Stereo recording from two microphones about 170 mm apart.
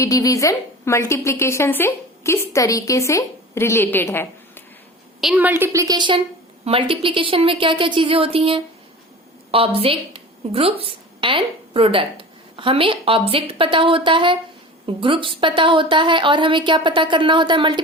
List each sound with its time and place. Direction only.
0.0 s a woman's voice: 20° left (ahead or behind)
5.2 s a woman's voice: 10° right (ahead or behind); by 17.7 s 30° right (ahead or behind)